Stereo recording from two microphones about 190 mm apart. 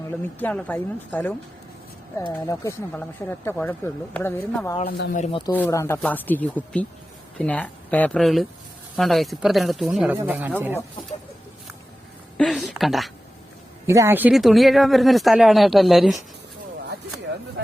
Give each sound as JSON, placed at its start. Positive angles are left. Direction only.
{"t": 0.3, "sound": "speech", "side_deg": 10}
{"t": 4.9, "sound": "speech", "side_deg": 55}
{"t": 5.2, "sound": "speech", "side_deg": 25}
{"t": 5.5, "sound": "speech", "side_deg": 10}
{"t": 12.4, "sound": "speech", "side_deg": 0}
{"t": 13.8, "sound": "speech", "side_deg": -15}